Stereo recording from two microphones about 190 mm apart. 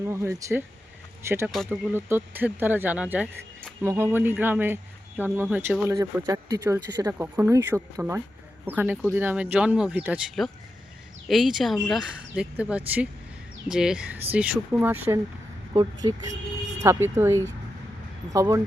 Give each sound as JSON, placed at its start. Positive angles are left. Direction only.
{"t": 0.0, "sound": "speech", "side_deg": -15}
{"t": 1.5, "sound": "speech", "side_deg": 0}
{"t": 1.9, "sound": "speech", "side_deg": -10}
{"t": 15.7, "sound": "speech", "side_deg": -20}